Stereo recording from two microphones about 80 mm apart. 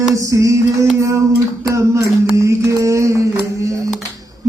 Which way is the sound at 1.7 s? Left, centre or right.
Right.